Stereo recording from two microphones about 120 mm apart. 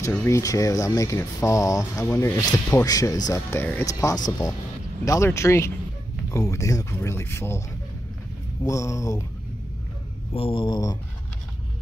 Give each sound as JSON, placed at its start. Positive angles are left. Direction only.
{"t": 0.0, "sound": "speech", "side_deg": 20}
{"t": 8.6, "sound": "speech", "side_deg": 25}
{"t": 10.3, "sound": "speech", "side_deg": 45}